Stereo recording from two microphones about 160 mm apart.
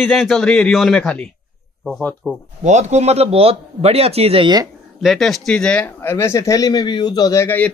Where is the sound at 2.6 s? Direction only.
45° right (ahead or behind); by 4.7 s 30° right (ahead or behind).